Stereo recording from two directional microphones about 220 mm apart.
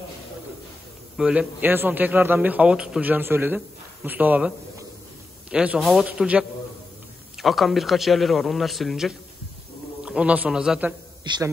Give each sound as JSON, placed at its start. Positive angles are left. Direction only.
{"t": 1.1, "sound": "a man's voice", "side_deg": -5}
{"t": 11.2, "sound": "a man's voice", "side_deg": -20}